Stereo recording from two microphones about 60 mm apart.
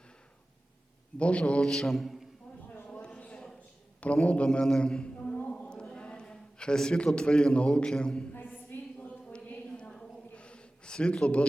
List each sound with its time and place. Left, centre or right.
1.2 s a man's voice: centre
1.6 s mantra: centre
2.9 s a sound: centre
3.3 s a sound: centre
4.0 s a man's voice: left
4.6 s speech: centre
5.5 s chant: centre
5.8 s a man's voice: centre
8.4 s a sound: left; by 9.9 s centre
10.3 s gasp: centre